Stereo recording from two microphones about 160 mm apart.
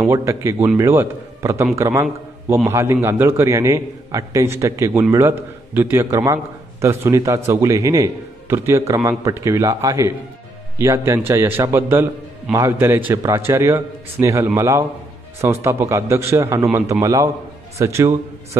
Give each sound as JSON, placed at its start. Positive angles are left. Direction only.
{"t": 0.0, "sound": "a man's voice", "side_deg": -15}